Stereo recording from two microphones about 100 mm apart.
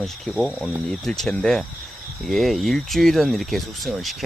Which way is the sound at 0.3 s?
Centre (ahead or behind).